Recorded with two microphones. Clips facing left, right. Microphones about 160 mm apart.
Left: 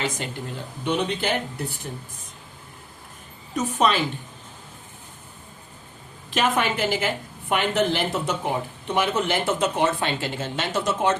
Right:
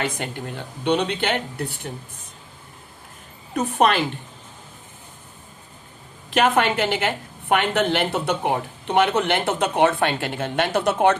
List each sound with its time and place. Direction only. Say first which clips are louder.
0.0 s a woman's voice: right 2 dB; 55° right (ahead or behind)
3.5 s a woman's voice: right 3 dB; 60° right (ahead or behind)
6.3 s a woman's voice: right 4 dB; 60° right (ahead or behind)